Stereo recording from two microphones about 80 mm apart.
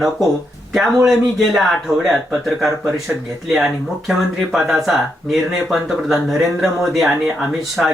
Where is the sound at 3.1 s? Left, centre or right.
Centre.